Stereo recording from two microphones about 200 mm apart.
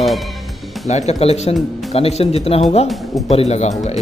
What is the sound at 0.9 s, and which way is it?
Speech, 35° left (ahead or behind).